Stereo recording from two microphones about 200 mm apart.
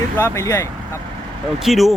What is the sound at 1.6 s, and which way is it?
Speech, centre (ahead or behind).